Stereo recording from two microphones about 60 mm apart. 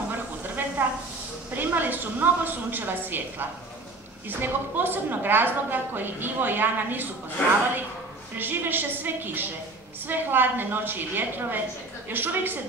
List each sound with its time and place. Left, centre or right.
0.4 s a sound: right
1.5 s a woman's voice: right
8.4 s a woman's voice: right